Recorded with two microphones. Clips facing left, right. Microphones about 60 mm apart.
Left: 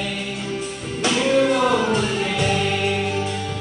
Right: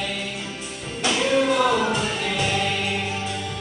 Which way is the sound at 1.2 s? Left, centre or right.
Left.